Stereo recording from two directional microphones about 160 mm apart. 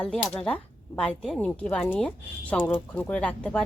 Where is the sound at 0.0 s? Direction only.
5° left (ahead or behind).